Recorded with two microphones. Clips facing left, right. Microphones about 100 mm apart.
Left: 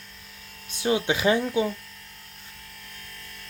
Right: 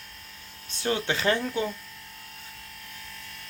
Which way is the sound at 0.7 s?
15° left (ahead or behind).